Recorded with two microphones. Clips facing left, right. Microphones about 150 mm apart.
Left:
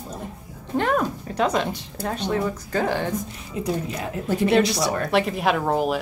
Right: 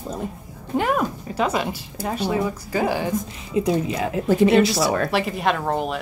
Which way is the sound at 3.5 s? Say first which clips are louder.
Right 7 dB; 90° right.